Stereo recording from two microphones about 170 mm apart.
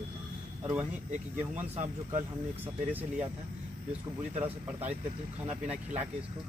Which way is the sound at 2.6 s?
10° right (ahead or behind).